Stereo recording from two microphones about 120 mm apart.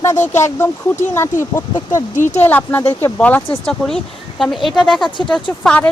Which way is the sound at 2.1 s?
90° left.